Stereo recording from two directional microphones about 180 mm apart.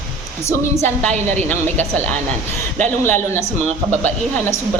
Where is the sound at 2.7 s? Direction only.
10° left (ahead or behind).